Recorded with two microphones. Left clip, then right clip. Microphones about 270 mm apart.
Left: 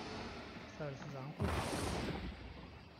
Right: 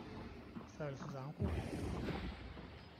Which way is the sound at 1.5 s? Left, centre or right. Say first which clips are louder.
Left 10 dB; left.